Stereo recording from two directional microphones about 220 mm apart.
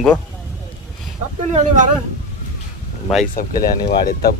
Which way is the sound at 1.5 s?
35° right (ahead or behind).